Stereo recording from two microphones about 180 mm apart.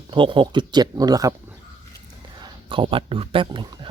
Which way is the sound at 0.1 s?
25° right (ahead or behind).